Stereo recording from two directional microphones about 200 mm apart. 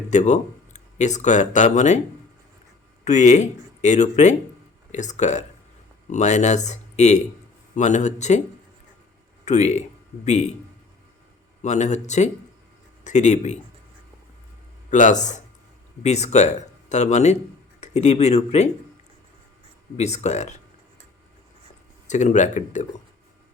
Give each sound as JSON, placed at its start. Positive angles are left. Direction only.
{"t": 0.1, "sound": "speech", "side_deg": 35}
{"t": 3.0, "sound": "speech", "side_deg": 35}
{"t": 9.4, "sound": "speech", "side_deg": 35}
{"t": 11.6, "sound": "speech", "side_deg": 35}
{"t": 14.8, "sound": "speech", "side_deg": 35}
{"t": 20.0, "sound": "speech", "side_deg": 35}
{"t": 22.0, "sound": "speech", "side_deg": 35}